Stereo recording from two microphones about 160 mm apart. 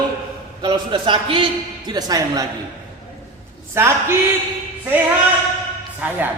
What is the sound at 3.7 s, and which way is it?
Speech, 15° right (ahead or behind).